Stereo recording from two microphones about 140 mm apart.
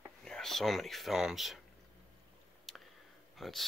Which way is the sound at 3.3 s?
Centre (ahead or behind).